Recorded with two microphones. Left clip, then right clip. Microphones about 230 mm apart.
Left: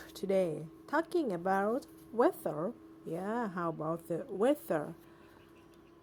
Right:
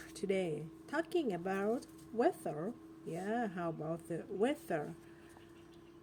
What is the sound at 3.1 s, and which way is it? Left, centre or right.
Speech, left.